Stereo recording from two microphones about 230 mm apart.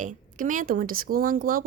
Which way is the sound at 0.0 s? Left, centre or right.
Right.